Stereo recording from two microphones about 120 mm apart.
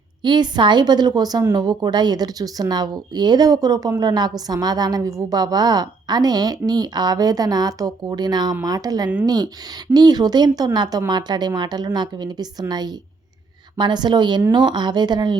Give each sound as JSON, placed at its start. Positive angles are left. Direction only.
{"t": 0.2, "sound": "speech", "side_deg": -40}